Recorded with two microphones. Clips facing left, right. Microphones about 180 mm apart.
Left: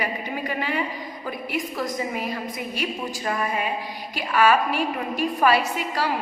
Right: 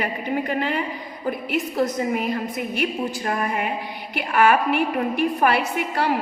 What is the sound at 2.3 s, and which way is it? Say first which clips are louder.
A woman's voice: right 4 dB; 55° right (ahead or behind).